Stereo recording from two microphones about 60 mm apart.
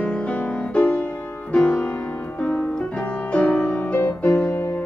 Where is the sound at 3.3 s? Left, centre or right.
Left.